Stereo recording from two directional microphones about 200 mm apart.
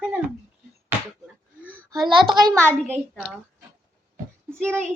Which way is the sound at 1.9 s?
20° right (ahead or behind).